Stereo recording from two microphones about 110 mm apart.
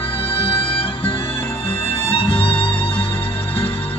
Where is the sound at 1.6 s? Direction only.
60° left (ahead or behind).